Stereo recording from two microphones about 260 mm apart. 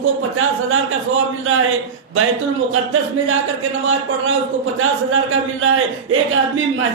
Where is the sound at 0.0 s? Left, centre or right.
Right.